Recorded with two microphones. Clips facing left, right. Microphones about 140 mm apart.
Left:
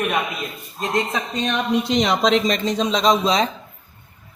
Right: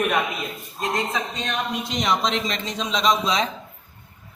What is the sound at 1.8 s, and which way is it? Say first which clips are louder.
Speech: left 4 dB; 80° left.